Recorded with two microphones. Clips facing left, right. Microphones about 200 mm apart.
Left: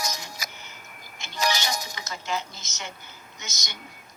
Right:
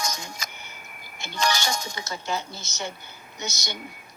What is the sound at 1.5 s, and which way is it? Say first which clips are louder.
Speech: right 1 dB; 20° left (ahead or behind).